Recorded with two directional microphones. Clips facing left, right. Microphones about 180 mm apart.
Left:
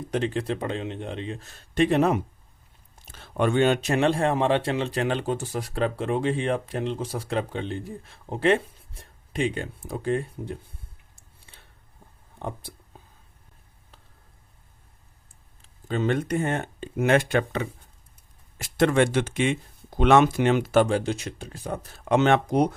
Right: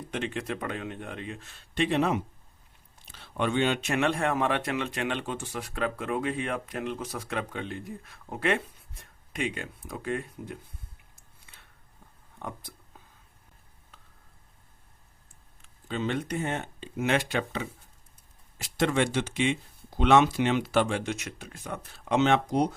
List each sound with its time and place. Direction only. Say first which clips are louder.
0.1 s speech: left 6 dB; 35° left (ahead or behind)
12.4 s speech: left 5 dB; 30° left (ahead or behind)
15.6 s speech: left 5 dB; 45° left (ahead or behind)
22.1 s speech: left 3 dB; 50° left (ahead or behind)